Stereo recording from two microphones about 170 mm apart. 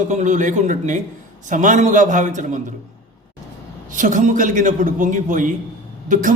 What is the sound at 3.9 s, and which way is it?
A man's voice, 50° right (ahead or behind).